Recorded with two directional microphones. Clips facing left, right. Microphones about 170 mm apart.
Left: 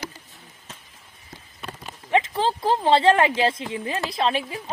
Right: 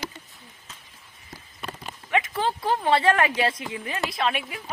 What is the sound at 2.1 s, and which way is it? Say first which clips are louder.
Speech: left 3 dB; 30° left (ahead or behind).